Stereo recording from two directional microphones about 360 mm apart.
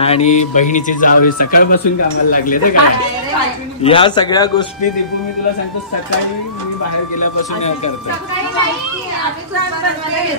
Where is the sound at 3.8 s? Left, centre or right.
Centre.